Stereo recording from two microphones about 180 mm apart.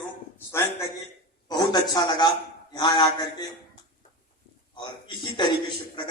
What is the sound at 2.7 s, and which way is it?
Speech, 25° left (ahead or behind).